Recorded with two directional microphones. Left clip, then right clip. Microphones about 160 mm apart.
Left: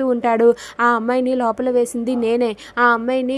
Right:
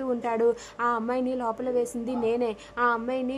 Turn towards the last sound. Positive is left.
turn(degrees=35)  # may be behind; listen again after turning